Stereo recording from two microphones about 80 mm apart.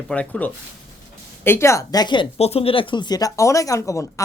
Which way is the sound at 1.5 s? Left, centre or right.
Left.